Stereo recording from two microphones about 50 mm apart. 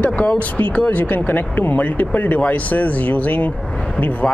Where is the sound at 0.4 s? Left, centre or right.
Left.